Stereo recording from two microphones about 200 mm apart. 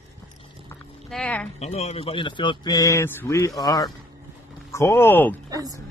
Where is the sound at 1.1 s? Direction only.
5° left (ahead or behind).